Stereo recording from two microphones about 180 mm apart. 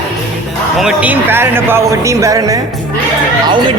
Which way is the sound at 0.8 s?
5° right (ahead or behind).